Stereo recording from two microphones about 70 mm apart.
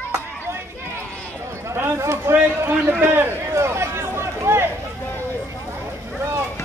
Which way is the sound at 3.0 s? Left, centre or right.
Right.